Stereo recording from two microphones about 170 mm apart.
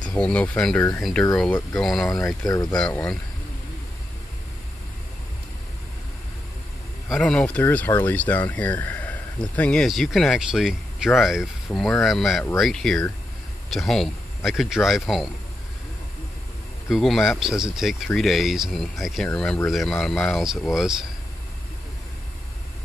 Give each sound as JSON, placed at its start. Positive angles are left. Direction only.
{"t": 0.1, "sound": "speech", "side_deg": 5}
{"t": 2.2, "sound": "speech", "side_deg": 20}
{"t": 2.8, "sound": "speech", "side_deg": 5}
{"t": 7.1, "sound": "speech", "side_deg": 5}
{"t": 16.9, "sound": "speech", "side_deg": 0}